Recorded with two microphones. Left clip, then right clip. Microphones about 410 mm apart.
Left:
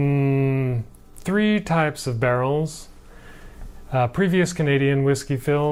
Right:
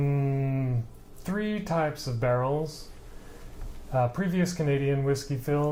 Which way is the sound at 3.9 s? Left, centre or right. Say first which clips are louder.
Left 7 dB; left.